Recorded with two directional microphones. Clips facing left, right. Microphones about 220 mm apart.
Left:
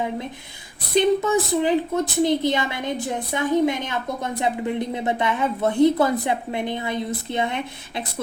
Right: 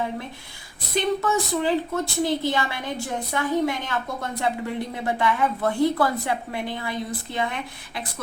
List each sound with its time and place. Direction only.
0.9 s a woman's voice: 20° left (ahead or behind)